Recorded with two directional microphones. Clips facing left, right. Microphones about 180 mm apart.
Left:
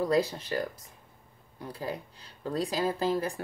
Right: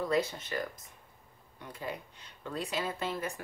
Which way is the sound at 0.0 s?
35° left (ahead or behind).